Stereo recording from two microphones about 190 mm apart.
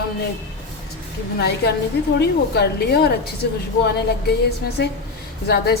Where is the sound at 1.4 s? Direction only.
60° left (ahead or behind).